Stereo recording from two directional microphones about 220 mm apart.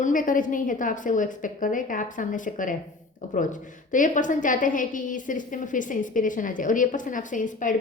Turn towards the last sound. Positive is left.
turn(degrees=35)  # may be behind; listen again after turning